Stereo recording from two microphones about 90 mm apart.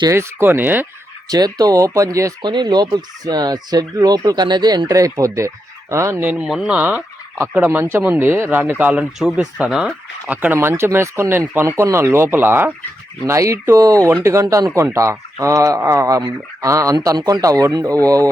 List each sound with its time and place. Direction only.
0.1 s speech: 25° right (ahead or behind)
1.3 s speech: 45° right (ahead or behind)
2.4 s speech: 55° right (ahead or behind); by 6.2 s 30° right (ahead or behind)
6.4 s speech: 5° right (ahead or behind)
6.7 s fowl: 15° right (ahead or behind)
7.5 s speech: 15° right (ahead or behind); by 14.0 s 40° right (ahead or behind)
14.4 s speech: 50° right (ahead or behind)
14.9 s speech: 35° right (ahead or behind)